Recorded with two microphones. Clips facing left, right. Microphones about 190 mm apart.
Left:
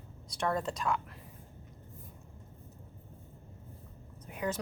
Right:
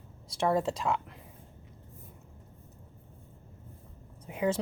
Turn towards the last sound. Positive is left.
turn(degrees=-20)  # may be behind; listen again after turning